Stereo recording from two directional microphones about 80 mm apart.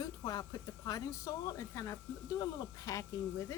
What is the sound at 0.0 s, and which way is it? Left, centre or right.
Speech, left.